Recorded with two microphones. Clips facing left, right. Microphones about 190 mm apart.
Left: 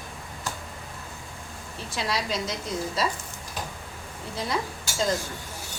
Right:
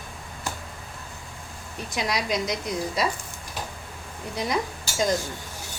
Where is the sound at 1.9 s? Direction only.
15° right (ahead or behind).